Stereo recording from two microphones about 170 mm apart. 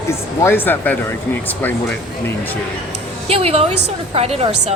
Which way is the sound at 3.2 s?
35° right (ahead or behind).